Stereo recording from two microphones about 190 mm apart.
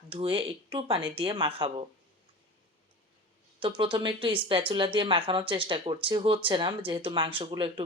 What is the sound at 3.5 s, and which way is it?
A woman's voice, 25° right (ahead or behind).